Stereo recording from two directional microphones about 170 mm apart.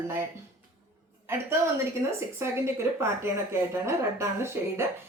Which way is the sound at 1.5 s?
15° right (ahead or behind).